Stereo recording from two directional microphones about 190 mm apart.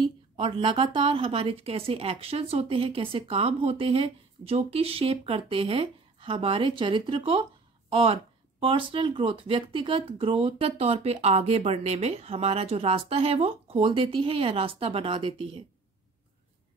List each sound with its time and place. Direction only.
0.0 s speech: 25° right (ahead or behind)